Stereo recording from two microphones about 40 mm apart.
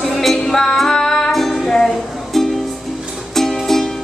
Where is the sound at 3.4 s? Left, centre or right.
Centre.